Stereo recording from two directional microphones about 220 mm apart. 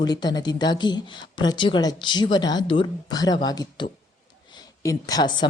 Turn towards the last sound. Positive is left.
turn(degrees=20)  # may be behind; listen again after turning